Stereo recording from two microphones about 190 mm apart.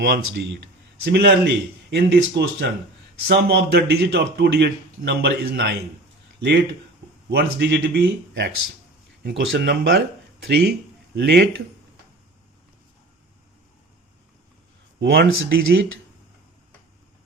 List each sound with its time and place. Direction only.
0.0 s speech: 65° right (ahead or behind)
7.3 s speech: 60° right (ahead or behind)
15.0 s speech: 65° right (ahead or behind)